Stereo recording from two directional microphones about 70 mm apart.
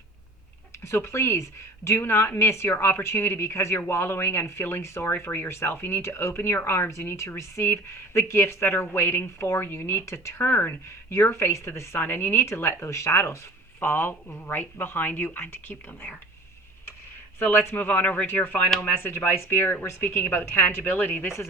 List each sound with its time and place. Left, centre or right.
0.9 s speech: left
17.4 s a woman's voice: left